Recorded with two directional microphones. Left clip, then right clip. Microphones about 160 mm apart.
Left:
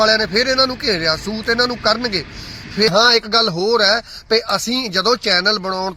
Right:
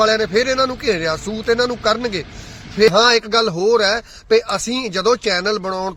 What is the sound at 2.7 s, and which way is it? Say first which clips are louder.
A man's voice: right 1 dB; 40° right (ahead or behind).